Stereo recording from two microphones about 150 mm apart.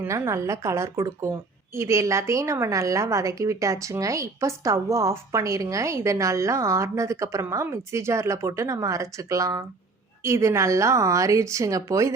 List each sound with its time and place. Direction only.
0.0 s speech: 20° right (ahead or behind)